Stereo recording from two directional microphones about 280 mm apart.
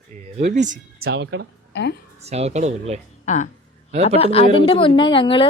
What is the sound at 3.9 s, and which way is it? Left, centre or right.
Speech, right.